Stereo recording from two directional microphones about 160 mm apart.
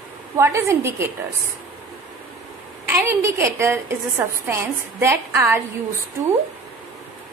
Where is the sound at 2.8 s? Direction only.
15° right (ahead or behind).